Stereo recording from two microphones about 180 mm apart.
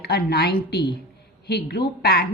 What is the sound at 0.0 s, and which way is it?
A woman's voice, 60° left (ahead or behind).